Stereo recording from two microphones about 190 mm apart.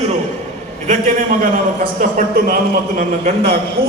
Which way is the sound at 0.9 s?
40° right (ahead or behind).